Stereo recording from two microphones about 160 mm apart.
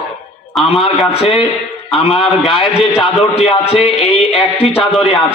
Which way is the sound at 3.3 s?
40° left (ahead or behind).